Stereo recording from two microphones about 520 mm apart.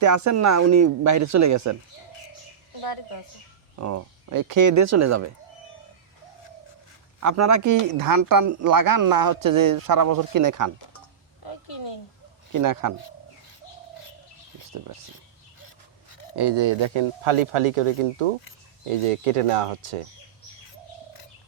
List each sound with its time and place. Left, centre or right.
0.0 s speech: right
3.8 s speech: right
7.2 s speech: right
12.5 s speech: right
14.7 s speech: right
16.3 s speech: right
19.2 s speech: right